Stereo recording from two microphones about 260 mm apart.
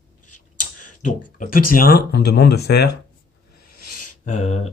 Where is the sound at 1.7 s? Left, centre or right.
Left.